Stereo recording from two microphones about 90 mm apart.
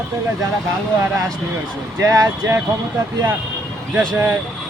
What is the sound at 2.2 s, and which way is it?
Speech, 20° right (ahead or behind).